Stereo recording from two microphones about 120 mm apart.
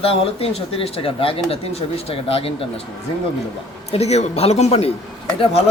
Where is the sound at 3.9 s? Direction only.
65° left (ahead or behind).